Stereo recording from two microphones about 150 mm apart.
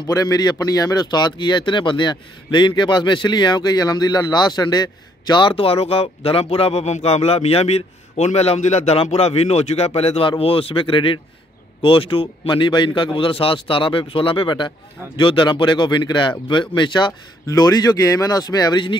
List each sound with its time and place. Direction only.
0.0 s speech: 25° left (ahead or behind)